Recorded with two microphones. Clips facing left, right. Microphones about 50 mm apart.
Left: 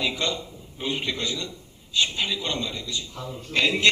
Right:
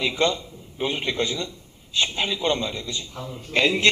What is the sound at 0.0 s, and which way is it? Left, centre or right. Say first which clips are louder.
A man's voice: right 4 dB; right.